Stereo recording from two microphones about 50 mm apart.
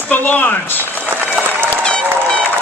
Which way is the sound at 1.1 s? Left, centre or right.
Right.